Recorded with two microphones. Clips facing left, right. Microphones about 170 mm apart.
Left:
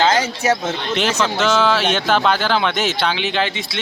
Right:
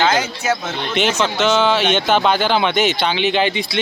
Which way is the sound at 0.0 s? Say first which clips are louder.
Left 1 dB; 30° left (ahead or behind).